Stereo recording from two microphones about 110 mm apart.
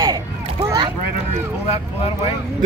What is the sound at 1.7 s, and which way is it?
Speech, 60° left (ahead or behind).